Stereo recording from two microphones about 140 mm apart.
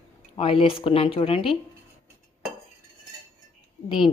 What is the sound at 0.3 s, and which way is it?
Speech, 40° left (ahead or behind).